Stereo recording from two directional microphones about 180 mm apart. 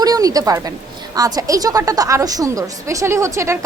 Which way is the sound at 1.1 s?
20° right (ahead or behind).